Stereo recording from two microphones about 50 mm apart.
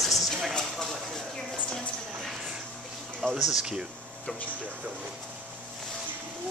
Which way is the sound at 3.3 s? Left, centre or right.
Centre.